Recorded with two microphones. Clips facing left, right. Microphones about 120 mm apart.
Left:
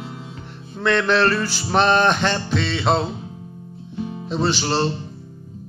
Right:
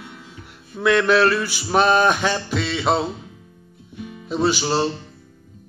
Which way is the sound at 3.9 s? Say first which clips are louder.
Left 6 dB; 30° left (ahead or behind).